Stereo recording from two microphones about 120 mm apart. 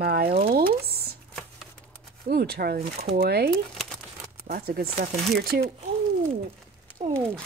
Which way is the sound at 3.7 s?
5° left (ahead or behind).